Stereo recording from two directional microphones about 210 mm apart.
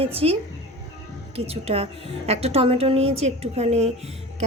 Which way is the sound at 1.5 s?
30° right (ahead or behind).